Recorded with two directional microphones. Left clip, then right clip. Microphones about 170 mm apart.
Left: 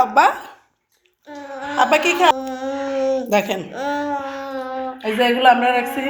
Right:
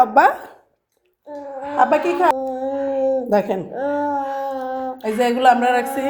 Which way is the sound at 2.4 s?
25° right (ahead or behind).